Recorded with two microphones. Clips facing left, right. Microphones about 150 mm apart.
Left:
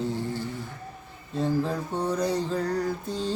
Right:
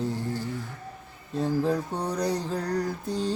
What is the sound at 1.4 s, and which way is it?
Music, 10° right (ahead or behind).